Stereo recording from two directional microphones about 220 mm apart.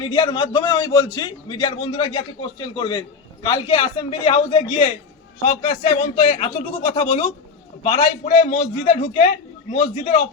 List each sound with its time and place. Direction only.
0.1 s a man's voice: 20° left (ahead or behind)